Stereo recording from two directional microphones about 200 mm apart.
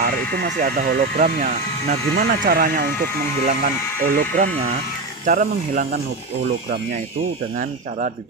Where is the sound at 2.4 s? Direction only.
45° right (ahead or behind).